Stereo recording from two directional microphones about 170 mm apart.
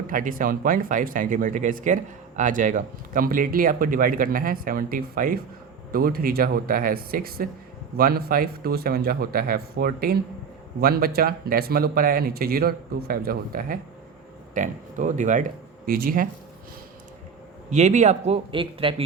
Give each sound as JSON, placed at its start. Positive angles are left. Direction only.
{"t": 0.1, "sound": "speech", "side_deg": -55}
{"t": 17.7, "sound": "speech", "side_deg": -45}